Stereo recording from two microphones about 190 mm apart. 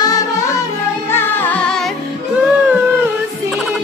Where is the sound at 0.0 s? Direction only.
20° left (ahead or behind).